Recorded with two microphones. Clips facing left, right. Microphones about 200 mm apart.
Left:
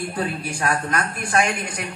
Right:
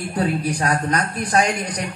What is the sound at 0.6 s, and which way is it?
A woman's voice, 35° right (ahead or behind).